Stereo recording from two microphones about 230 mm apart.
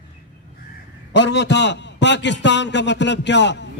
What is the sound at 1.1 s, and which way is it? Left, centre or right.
A man's voice, left.